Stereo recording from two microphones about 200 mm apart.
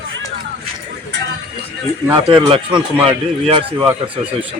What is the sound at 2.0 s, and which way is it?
Speech, 20° right (ahead or behind).